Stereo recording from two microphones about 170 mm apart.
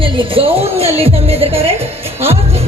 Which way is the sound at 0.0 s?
30° right (ahead or behind).